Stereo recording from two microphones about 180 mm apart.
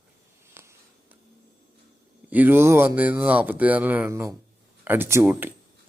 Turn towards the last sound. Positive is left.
turn(degrees=-10)  # may be behind; listen again after turning